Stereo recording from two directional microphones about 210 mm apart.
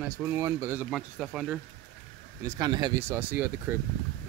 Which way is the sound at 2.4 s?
15° right (ahead or behind).